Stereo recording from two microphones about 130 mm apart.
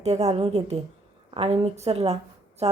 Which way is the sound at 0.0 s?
55° right (ahead or behind).